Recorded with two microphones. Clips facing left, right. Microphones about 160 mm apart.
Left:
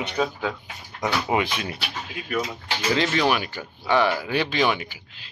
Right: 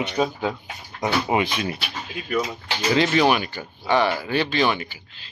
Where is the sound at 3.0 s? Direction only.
10° right (ahead or behind).